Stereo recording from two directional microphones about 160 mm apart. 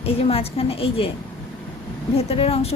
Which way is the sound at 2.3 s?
35° left (ahead or behind).